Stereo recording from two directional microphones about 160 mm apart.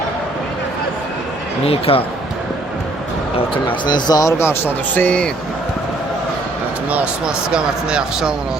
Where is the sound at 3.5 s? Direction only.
30° left (ahead or behind); by 5.3 s 5° left (ahead or behind).